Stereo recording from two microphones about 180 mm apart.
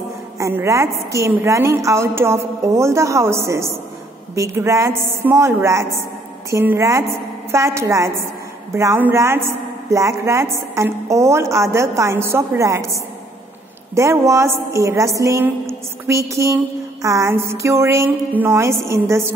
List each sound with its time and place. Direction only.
0.4 s a woman's voice: 15° right (ahead or behind)